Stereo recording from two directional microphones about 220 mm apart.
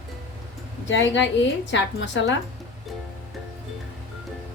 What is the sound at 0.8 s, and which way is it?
A woman's voice, 55° left (ahead or behind).